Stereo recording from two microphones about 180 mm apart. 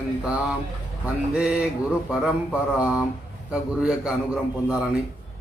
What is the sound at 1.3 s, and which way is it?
A man's voice, 5° right (ahead or behind).